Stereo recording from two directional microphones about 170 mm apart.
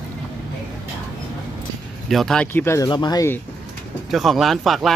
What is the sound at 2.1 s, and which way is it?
Speech, centre (ahead or behind).